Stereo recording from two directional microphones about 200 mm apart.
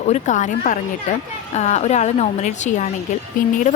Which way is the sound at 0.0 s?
35° left (ahead or behind).